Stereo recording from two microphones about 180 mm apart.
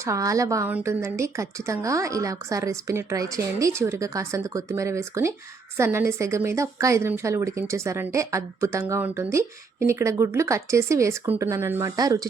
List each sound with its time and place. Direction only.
0.0 s a woman's voice: 15° right (ahead or behind)